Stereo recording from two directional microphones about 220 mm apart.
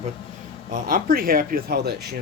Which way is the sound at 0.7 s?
40° right (ahead or behind).